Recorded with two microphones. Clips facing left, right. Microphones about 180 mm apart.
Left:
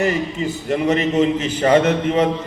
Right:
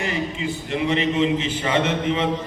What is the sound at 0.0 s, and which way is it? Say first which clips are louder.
A man's voice: left 6 dB; 40° left (ahead or behind).